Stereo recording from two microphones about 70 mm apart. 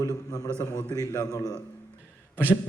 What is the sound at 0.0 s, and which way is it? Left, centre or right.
A man's voice, left.